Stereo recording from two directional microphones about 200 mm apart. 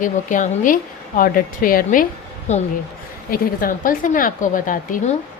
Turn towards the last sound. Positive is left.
turn(degrees=40)  # may be behind; listen again after turning